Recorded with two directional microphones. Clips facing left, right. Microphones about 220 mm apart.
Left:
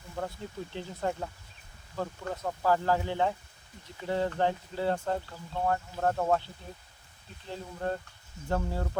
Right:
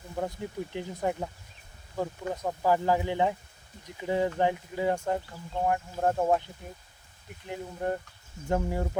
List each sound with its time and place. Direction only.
0.2 s speech: 15° right (ahead or behind)